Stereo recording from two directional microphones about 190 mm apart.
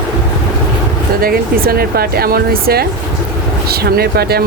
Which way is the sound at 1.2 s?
50° right (ahead or behind).